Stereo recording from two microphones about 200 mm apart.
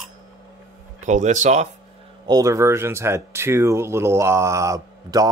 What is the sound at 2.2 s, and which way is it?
Speech, 15° right (ahead or behind).